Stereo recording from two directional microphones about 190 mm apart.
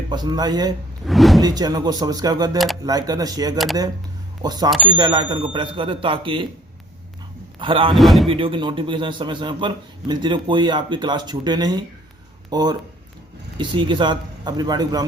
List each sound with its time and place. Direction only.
0.1 s a man's voice: 20° right (ahead or behind)
1.0 s speech: centre (ahead or behind)
1.4 s a man's voice: 20° right (ahead or behind)
7.6 s a man's voice: 25° right (ahead or behind)
7.9 s speech: centre (ahead or behind)
8.3 s a man's voice: 25° right (ahead or behind)